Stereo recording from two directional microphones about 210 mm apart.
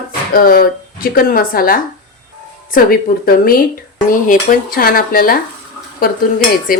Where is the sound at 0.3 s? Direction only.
45° left (ahead or behind).